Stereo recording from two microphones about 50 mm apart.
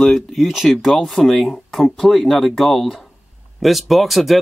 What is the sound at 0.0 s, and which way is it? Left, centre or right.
Speech, centre.